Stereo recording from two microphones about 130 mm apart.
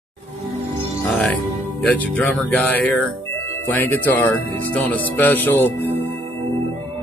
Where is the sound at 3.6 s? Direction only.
15° left (ahead or behind).